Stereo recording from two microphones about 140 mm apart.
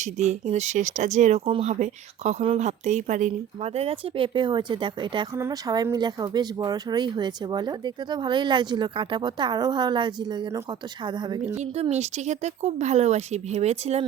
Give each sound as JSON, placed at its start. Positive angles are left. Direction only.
{"t": 0.0, "sound": "speech", "side_deg": -55}
{"t": 11.5, "sound": "speech", "side_deg": -50}